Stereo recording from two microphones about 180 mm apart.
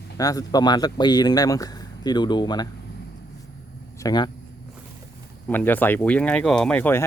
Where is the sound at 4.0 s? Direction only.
20° left (ahead or behind).